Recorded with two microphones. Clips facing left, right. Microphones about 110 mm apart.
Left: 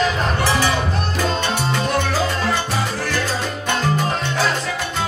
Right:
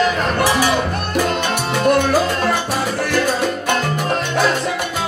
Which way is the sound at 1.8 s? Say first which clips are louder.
Right 9 dB; 55° right (ahead or behind).